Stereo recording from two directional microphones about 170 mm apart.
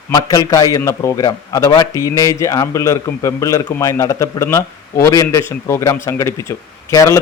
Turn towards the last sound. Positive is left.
turn(degrees=20)  # may be behind; listen again after turning